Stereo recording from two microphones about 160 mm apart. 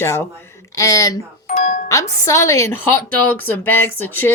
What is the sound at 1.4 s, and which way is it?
Speech, 50° left (ahead or behind).